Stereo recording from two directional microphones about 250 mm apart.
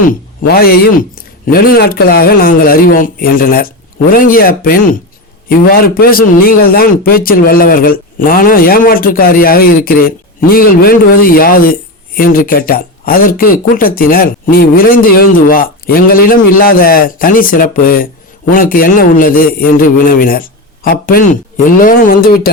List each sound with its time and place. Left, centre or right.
0.1 s speech: left